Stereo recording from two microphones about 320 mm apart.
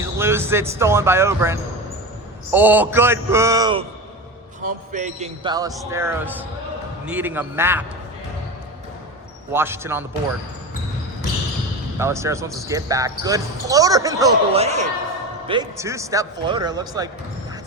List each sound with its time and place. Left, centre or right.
0.0 s speech: centre
4.6 s a man's voice: right; by 7.9 s centre
9.5 s speech: centre
11.9 s speech: centre